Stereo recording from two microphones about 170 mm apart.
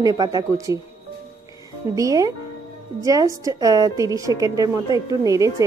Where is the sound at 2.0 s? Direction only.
20° right (ahead or behind).